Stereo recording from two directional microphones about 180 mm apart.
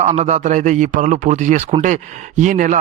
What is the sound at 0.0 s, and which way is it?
A man's voice, 40° right (ahead or behind).